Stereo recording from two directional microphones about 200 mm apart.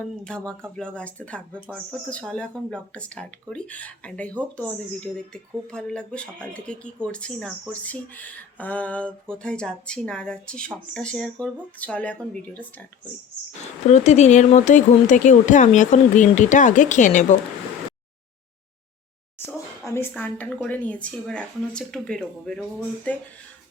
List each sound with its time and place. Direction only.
0.3 s speech: 5° left (ahead or behind)
1.5 s a woman's voice: 5° right (ahead or behind)
13.8 s speech: 35° left (ahead or behind)
19.5 s a woman's voice: 10° left (ahead or behind)